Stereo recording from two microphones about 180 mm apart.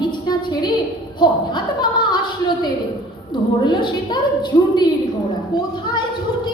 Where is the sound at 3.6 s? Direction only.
25° left (ahead or behind).